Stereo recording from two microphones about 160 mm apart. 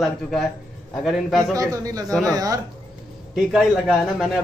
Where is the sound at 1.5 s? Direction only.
20° right (ahead or behind).